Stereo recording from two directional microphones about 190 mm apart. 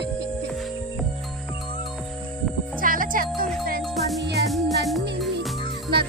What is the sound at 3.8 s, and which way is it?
Music, centre (ahead or behind).